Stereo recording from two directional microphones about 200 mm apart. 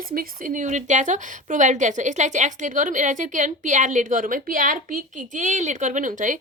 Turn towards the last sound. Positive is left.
turn(degrees=-40)  # may be behind; listen again after turning